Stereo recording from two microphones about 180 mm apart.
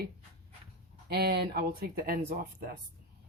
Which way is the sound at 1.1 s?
65° right (ahead or behind).